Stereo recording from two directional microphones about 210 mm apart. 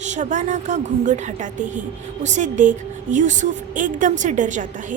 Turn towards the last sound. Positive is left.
turn(degrees=-35)  # may be behind; listen again after turning